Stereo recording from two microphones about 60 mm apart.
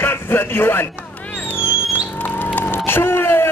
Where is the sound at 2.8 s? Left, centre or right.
Left.